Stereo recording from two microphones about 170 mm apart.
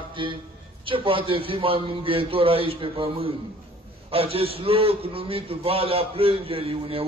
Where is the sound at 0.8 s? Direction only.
30° right (ahead or behind).